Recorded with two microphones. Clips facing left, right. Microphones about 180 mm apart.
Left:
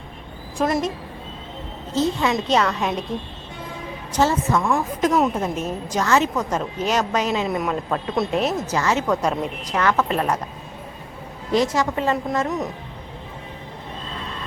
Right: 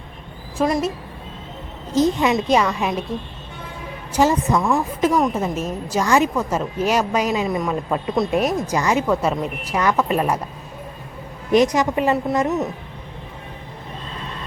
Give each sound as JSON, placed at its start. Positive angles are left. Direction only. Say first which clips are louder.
{"t": 0.6, "sound": "speech", "louder": "right 2 dB", "side_deg": -5}
{"t": 2.0, "sound": "a woman's voice", "louder": "right 3 dB", "side_deg": -15}
{"t": 4.1, "sound": "a woman's voice", "louder": "right 2 dB", "side_deg": -15}
{"t": 4.6, "sound": "speech", "louder": "right 2 dB", "side_deg": 0}
{"t": 5.3, "sound": "a woman's voice", "louder": "right 1 dB", "side_deg": -5}
{"t": 11.5, "sound": "a woman's voice", "louder": "right 4 dB", "side_deg": -20}